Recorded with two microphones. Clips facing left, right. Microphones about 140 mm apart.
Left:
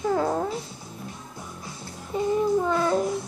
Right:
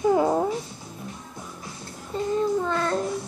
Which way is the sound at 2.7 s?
10° left (ahead or behind).